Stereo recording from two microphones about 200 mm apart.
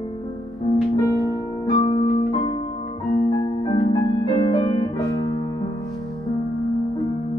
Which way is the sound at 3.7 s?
25° left (ahead or behind).